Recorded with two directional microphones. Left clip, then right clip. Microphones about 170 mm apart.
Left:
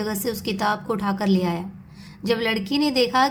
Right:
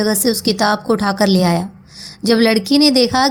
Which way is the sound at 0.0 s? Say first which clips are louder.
Right 10 dB; 30° right (ahead or behind).